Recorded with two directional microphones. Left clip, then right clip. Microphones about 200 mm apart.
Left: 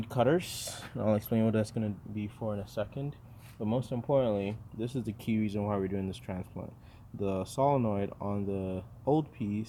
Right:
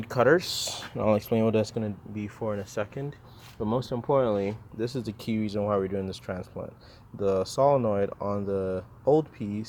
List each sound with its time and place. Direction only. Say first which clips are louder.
0.1 s speech: right 6 dB; 5° right (ahead or behind)
2.4 s speech: right 5 dB; 15° right (ahead or behind)
9.4 s speech: right 2 dB; 45° right (ahead or behind)